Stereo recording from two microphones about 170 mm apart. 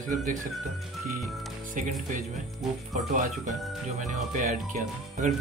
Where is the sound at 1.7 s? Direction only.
50° right (ahead or behind).